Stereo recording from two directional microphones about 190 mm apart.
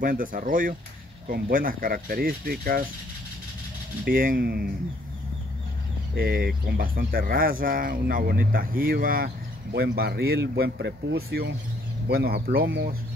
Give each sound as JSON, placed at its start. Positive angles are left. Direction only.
{"t": 0.0, "sound": "speech", "side_deg": -45}
{"t": 4.0, "sound": "speech", "side_deg": -50}
{"t": 6.1, "sound": "speech", "side_deg": -55}